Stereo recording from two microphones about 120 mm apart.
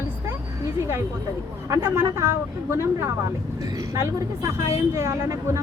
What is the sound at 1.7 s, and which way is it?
Speech, 20° right (ahead or behind).